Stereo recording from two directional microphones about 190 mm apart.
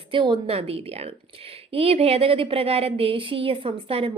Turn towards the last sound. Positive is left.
turn(degrees=-30)  # may be behind; listen again after turning